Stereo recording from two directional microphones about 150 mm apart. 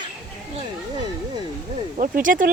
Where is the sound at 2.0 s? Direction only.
65° right (ahead or behind).